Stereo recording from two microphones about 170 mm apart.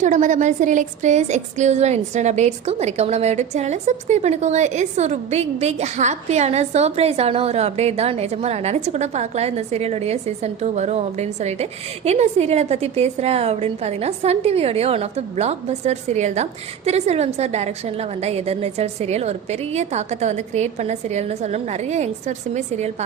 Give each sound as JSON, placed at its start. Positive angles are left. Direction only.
{"t": 0.0, "sound": "a woman's voice", "side_deg": -45}